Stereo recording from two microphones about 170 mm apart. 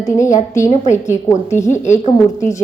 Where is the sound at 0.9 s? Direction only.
15° left (ahead or behind).